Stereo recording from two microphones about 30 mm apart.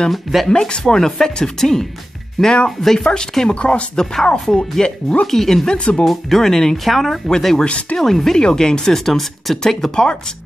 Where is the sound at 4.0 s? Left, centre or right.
Centre.